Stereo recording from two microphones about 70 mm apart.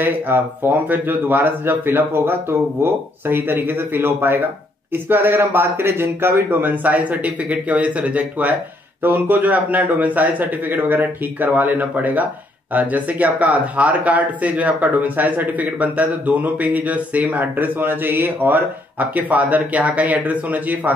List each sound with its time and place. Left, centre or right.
0.0 s speech: right